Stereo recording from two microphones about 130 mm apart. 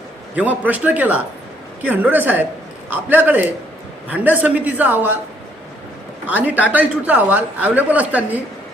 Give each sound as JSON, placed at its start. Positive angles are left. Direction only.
{"t": 0.3, "sound": "speech", "side_deg": -10}
{"t": 6.2, "sound": "speech", "side_deg": -10}